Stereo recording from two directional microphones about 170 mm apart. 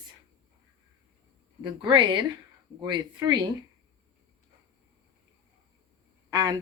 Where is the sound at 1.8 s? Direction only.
25° right (ahead or behind).